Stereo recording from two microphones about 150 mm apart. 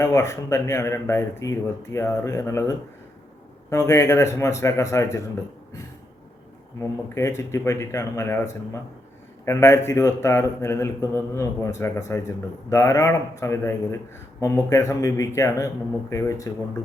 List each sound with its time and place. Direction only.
0.0 s a man's voice: 20° left (ahead or behind)
7.1 s a man's voice: 20° left (ahead or behind)